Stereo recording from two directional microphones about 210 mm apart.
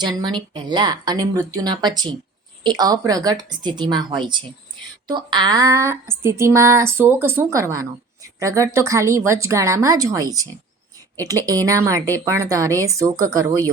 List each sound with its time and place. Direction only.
0.0 s speech: 20° right (ahead or behind)